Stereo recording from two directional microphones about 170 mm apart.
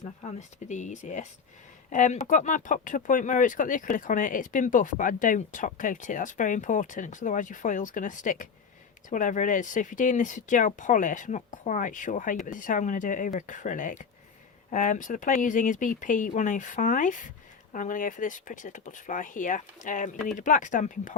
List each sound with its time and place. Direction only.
0.0 s speech: 45° left (ahead or behind)